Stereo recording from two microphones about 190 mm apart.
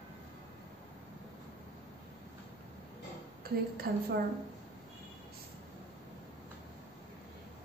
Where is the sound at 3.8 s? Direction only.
55° right (ahead or behind).